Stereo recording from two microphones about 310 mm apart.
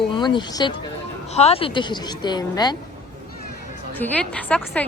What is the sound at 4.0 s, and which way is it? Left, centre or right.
Speech, centre.